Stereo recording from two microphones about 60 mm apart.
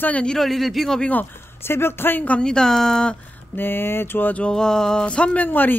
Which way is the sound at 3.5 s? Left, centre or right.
Left.